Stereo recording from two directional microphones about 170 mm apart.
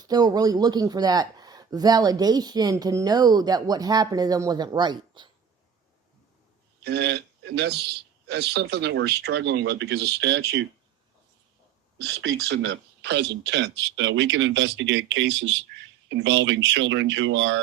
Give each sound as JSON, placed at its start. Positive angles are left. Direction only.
{"t": 0.1, "sound": "speech", "side_deg": -25}
{"t": 6.8, "sound": "a man's voice", "side_deg": -75}
{"t": 12.5, "sound": "speech", "side_deg": -90}